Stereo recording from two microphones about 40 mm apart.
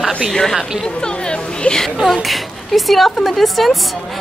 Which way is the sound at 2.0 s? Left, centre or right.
Centre.